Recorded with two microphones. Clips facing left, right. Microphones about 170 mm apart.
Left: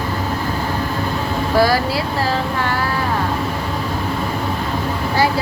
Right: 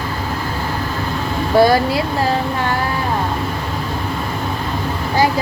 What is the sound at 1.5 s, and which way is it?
Speech, 20° right (ahead or behind).